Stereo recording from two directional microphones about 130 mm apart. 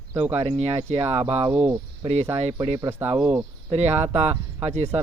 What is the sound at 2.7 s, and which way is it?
Speech, 20° right (ahead or behind).